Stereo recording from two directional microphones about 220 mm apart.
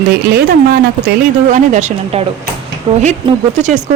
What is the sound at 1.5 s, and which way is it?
A woman's voice, 30° right (ahead or behind).